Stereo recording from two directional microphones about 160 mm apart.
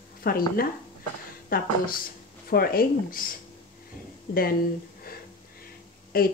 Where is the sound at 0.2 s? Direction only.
70° left (ahead or behind).